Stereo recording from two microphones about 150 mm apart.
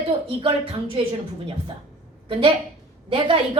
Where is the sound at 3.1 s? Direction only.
35° right (ahead or behind).